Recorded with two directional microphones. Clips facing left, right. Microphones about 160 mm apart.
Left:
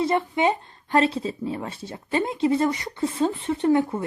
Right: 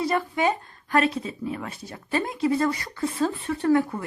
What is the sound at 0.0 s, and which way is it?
A child's voice, 25° left (ahead or behind).